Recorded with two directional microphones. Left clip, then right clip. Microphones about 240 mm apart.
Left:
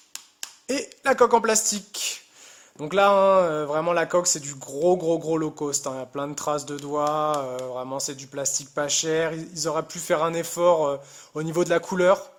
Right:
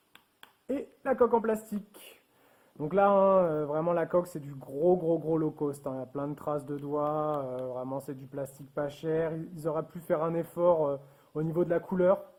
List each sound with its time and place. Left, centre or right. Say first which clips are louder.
0.7 s speech: left 8 dB; left